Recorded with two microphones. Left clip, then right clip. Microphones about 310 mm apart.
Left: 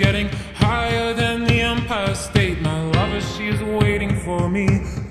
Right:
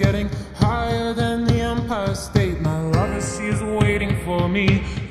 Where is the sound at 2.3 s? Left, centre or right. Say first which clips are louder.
Left 2 dB; left.